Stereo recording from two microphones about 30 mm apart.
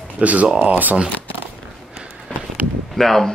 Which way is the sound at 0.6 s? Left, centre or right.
Right.